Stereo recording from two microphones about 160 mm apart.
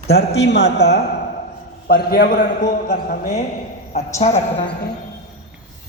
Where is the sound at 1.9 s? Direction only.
70° left (ahead or behind).